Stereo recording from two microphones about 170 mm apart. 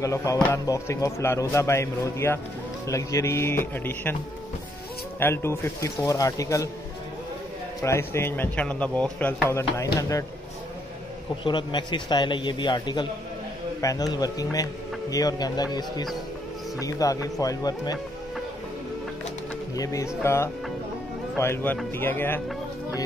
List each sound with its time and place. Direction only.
0.0 s a man's voice: 20° left (ahead or behind)
5.2 s a man's voice: 15° left (ahead or behind)
7.8 s a man's voice: 15° left (ahead or behind)
11.4 s a man's voice: 25° left (ahead or behind)
19.7 s a man's voice: 20° left (ahead or behind)
21.4 s speech: 15° left (ahead or behind)